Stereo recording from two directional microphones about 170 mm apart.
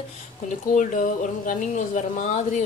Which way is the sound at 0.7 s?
50° left (ahead or behind).